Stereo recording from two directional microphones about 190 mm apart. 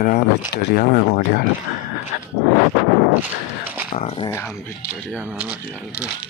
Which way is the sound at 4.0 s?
30° left (ahead or behind).